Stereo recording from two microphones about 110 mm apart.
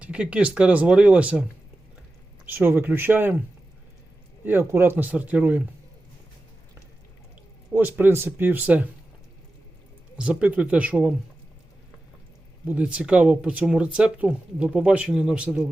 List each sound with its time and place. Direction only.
0.0 s speech: 10° right (ahead or behind)
2.5 s speech: 20° right (ahead or behind)
4.4 s speech: 20° right (ahead or behind)
7.7 s speech: 15° right (ahead or behind)
10.2 s speech: 10° right (ahead or behind)
12.6 s speech: 10° right (ahead or behind)